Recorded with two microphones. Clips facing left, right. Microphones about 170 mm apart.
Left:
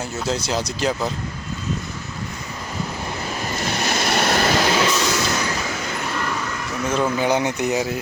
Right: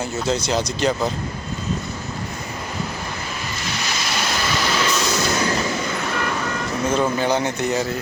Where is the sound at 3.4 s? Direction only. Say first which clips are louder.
Left 4 dB; 50° left (ahead or behind).